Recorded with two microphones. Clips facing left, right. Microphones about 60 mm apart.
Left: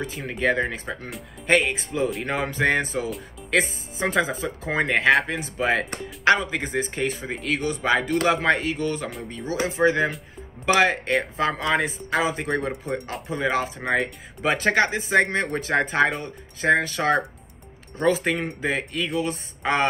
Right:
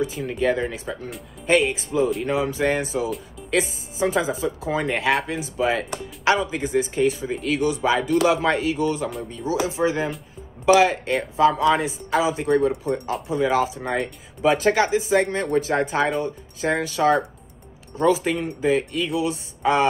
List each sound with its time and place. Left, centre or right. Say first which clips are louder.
0.0 s speech: right 2 dB; left